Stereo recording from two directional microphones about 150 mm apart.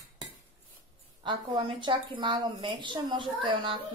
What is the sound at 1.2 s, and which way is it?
A woman's voice, 30° right (ahead or behind).